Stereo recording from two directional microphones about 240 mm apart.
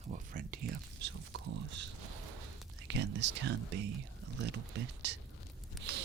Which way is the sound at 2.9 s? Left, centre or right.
Right.